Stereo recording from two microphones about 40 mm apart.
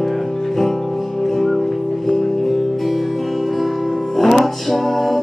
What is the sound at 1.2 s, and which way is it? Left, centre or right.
Music, centre.